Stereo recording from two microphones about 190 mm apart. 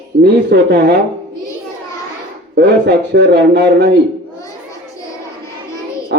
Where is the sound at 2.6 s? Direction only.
65° right (ahead or behind).